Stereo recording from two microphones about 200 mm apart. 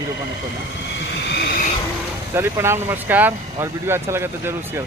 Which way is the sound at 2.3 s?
10° right (ahead or behind).